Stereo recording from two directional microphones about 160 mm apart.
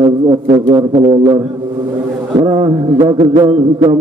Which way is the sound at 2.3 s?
25° right (ahead or behind).